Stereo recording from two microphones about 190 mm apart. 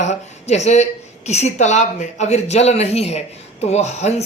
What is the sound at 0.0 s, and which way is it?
Speech, 35° left (ahead or behind).